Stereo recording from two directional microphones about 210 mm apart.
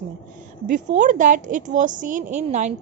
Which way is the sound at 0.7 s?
35° right (ahead or behind).